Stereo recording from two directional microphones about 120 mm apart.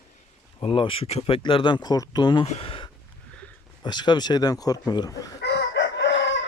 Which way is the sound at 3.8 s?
40° left (ahead or behind).